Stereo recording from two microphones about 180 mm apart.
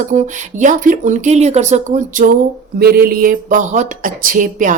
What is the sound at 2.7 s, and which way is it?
Speech, 55° right (ahead or behind).